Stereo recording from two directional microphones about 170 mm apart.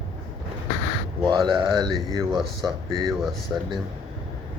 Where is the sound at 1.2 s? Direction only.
30° right (ahead or behind).